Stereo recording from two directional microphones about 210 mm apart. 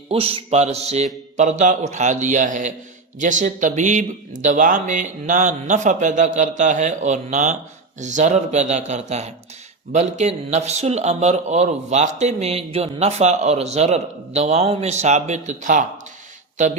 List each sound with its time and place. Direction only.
0.1 s speech: 25° right (ahead or behind)